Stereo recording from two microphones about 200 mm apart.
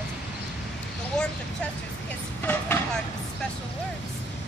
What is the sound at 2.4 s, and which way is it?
Vehicle, 10° left (ahead or behind).